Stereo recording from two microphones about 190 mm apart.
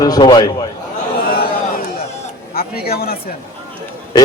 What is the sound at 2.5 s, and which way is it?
Speech, 55° left (ahead or behind).